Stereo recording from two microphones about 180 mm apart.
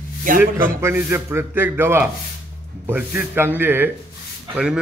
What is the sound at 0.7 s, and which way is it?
Chopping, 15° right (ahead or behind).